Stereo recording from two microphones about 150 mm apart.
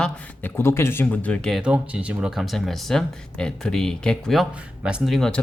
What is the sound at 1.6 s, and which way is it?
Speech, 5° right (ahead or behind).